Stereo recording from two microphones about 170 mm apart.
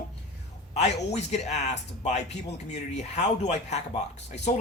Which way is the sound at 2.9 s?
40° left (ahead or behind).